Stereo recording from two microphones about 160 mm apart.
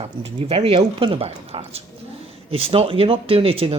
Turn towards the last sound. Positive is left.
turn(degrees=-40)  # may be behind; listen again after turning